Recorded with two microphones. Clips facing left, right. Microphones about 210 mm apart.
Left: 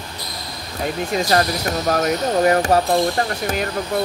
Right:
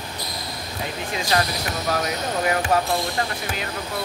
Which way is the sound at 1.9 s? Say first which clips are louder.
Left 6 dB; 45° left (ahead or behind).